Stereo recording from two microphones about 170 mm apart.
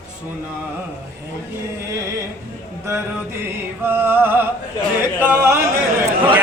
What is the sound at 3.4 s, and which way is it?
Mantra, 15° right (ahead or behind).